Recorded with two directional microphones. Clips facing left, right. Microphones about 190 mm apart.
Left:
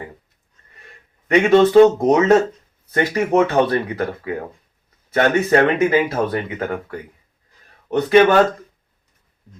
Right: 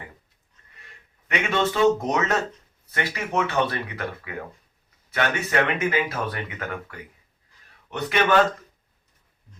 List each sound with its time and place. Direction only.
1.3 s speech: 40° left (ahead or behind)
2.0 s speech: 30° left (ahead or behind)